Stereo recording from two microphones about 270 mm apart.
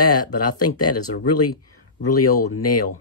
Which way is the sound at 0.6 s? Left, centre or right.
Left.